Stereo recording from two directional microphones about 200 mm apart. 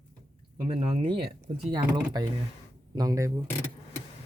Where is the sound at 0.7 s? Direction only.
30° right (ahead or behind).